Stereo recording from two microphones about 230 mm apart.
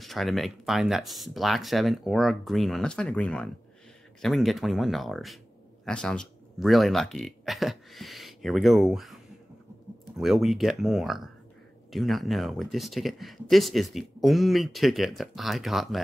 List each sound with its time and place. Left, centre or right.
0.0 s speech: centre